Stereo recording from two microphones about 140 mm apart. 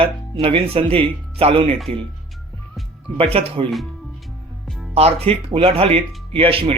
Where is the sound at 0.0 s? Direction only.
40° right (ahead or behind).